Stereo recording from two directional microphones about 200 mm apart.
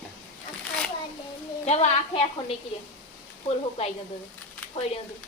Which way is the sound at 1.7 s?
30° left (ahead or behind).